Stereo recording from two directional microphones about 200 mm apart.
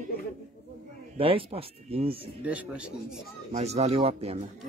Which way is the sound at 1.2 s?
30° right (ahead or behind).